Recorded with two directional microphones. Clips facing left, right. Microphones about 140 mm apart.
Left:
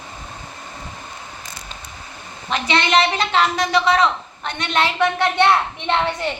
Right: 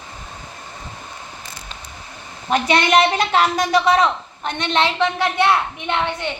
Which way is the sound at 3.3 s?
40° right (ahead or behind).